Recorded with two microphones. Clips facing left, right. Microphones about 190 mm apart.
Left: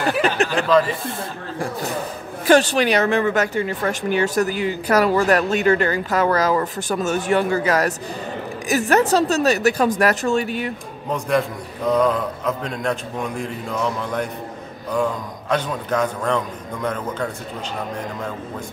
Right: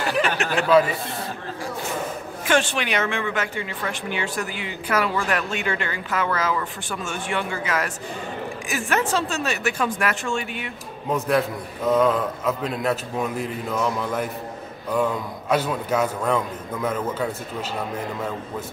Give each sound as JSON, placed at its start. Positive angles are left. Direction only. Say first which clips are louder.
{"t": 0.4, "sound": "chuckle", "louder": "left 5 dB", "side_deg": 35}
{"t": 2.4, "sound": "a woman's voice", "louder": "left 7 dB", "side_deg": 40}
{"t": 11.1, "sound": "a man's voice", "louder": "left 1 dB", "side_deg": -5}